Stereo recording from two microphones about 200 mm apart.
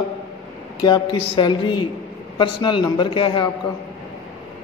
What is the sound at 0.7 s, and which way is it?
A woman's voice, 20° left (ahead or behind).